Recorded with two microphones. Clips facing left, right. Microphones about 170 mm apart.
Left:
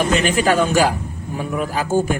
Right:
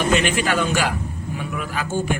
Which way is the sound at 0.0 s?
40° left (ahead or behind).